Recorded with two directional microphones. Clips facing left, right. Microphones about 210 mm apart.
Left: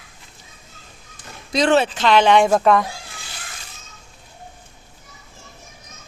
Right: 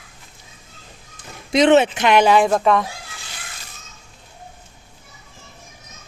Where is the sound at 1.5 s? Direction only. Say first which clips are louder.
Right 4 dB; 20° right (ahead or behind); by 2.9 s centre (ahead or behind).